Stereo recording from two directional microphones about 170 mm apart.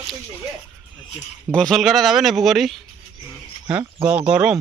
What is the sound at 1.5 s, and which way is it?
Speech, centre (ahead or behind).